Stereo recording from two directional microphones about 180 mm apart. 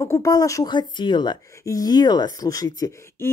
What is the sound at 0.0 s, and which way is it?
Speech, 15° left (ahead or behind).